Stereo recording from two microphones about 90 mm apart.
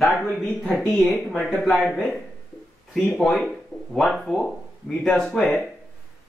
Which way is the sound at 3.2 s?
5° left (ahead or behind).